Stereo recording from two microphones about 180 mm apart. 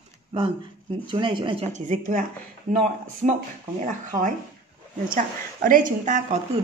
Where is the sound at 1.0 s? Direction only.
25° right (ahead or behind); by 2.2 s 50° right (ahead or behind).